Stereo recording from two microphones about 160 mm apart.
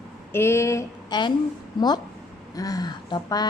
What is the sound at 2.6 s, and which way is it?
Speech, 25° left (ahead or behind).